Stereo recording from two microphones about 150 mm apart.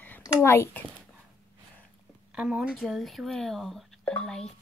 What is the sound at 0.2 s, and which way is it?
Speech, 20° left (ahead or behind).